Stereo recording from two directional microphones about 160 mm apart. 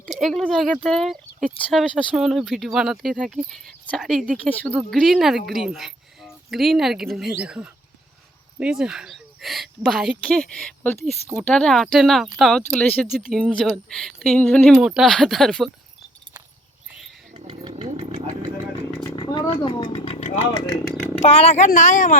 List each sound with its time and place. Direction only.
0.0 s speech: centre (ahead or behind)
13.1 s speech: centre (ahead or behind)
17.3 s speech: 35° right (ahead or behind)
19.1 s speech: 30° left (ahead or behind); by 22.2 s 55° left (ahead or behind)